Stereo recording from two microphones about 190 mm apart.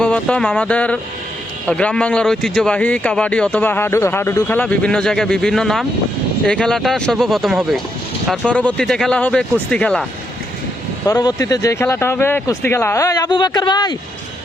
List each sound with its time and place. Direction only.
0.0 s a man's voice: 5° left (ahead or behind)
11.1 s speech: 20° left (ahead or behind)